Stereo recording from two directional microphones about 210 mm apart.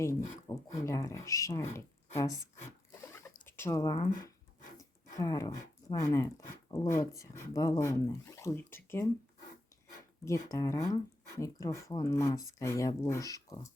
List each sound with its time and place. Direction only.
0.0 s speech: 15° left (ahead or behind)
2.9 s pig: 10° left (ahead or behind)
3.4 s speech: 10° left (ahead or behind)
4.8 s a sound: 15° left (ahead or behind)
6.0 s speech: 15° left (ahead or behind)
10.2 s speech: 15° left (ahead or behind)